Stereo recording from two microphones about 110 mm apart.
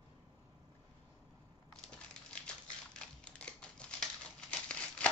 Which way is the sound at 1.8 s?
10° left (ahead or behind).